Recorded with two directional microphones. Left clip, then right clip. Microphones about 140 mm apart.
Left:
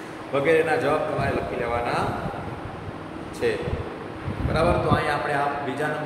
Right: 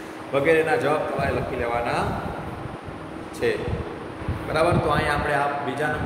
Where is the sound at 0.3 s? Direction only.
25° right (ahead or behind).